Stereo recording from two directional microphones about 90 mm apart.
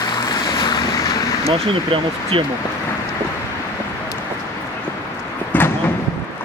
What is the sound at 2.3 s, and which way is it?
Speech, 85° right.